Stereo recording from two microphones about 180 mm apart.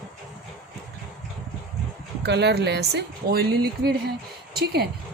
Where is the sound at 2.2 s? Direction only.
70° right (ahead or behind).